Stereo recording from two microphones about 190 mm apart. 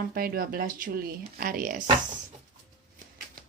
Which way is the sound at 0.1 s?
50° right (ahead or behind).